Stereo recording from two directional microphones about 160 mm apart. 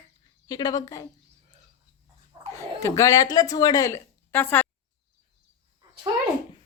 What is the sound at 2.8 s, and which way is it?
A woman's voice, 20° left (ahead or behind).